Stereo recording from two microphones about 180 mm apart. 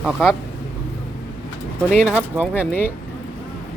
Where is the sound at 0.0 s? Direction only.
Centre (ahead or behind).